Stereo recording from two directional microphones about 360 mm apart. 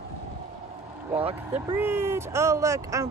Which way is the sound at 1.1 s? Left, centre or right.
Centre.